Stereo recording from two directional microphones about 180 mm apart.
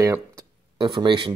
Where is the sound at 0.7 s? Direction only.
25° right (ahead or behind).